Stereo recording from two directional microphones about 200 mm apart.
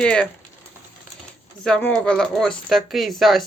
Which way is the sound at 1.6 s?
5° left (ahead or behind).